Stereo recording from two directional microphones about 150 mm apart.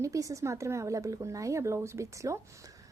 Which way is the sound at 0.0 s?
20° right (ahead or behind).